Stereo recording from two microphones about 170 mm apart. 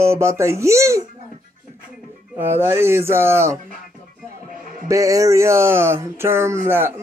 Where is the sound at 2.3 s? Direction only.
10° right (ahead or behind).